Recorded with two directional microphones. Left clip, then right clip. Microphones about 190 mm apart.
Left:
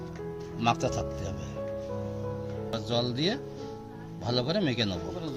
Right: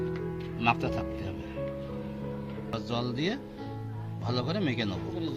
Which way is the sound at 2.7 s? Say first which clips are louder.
Left 3 dB; 30° left (ahead or behind).